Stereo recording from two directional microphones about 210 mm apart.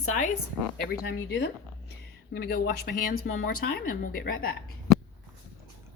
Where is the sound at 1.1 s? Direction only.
50° left (ahead or behind).